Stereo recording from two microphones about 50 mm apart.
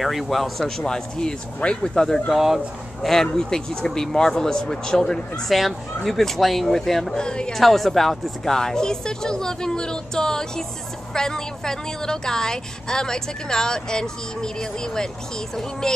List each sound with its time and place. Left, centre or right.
0.0 s a woman's voice: centre
2.3 s speech: centre
3.1 s a woman's voice: centre
7.2 s a woman's voice: centre
7.5 s a woman's voice: centre